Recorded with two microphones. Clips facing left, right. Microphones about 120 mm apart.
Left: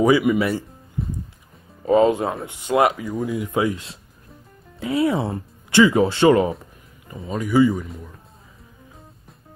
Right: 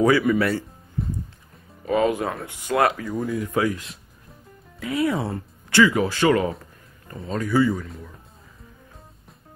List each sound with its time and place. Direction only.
0.0 s speech: 15° left (ahead or behind)
1.0 s music: centre (ahead or behind)
1.9 s speech: 25° left (ahead or behind)
7.1 s speech: 10° left (ahead or behind)